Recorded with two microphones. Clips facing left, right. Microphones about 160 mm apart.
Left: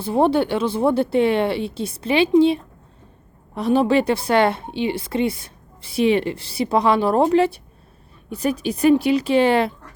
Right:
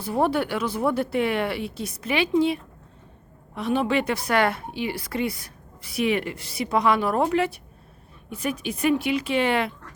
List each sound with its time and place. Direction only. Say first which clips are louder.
0.0 s a woman's voice: left 5 dB; 25° left (ahead or behind)